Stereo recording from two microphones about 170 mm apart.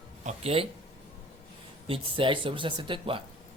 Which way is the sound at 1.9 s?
30° right (ahead or behind).